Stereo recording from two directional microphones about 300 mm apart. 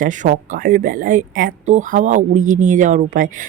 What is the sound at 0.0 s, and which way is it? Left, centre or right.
Speech, right.